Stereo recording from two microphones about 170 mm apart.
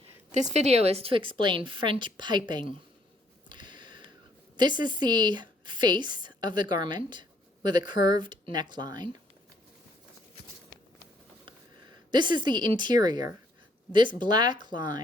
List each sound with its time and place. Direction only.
0.3 s a woman's voice: 45° right (ahead or behind); by 2.7 s 25° right (ahead or behind)
3.5 s a sound: 25° right (ahead or behind)
4.5 s a woman's voice: 25° right (ahead or behind)
12.1 s a woman's voice: 25° right (ahead or behind)